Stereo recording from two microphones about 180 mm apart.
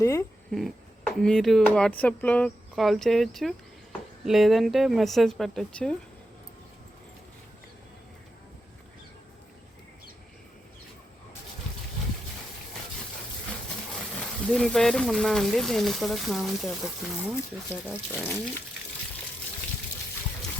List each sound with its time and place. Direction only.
0.0 s speech: 15° left (ahead or behind)
0.5 s speech: centre (ahead or behind)
14.2 s speech: 5° left (ahead or behind)